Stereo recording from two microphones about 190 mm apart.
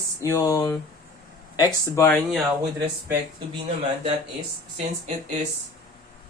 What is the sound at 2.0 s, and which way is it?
Speech, centre (ahead or behind).